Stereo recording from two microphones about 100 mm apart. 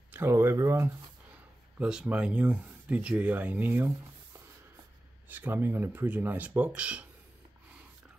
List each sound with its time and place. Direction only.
0.1 s speech: 25° right (ahead or behind)
1.8 s speech: 10° right (ahead or behind)
5.3 s speech: 20° right (ahead or behind)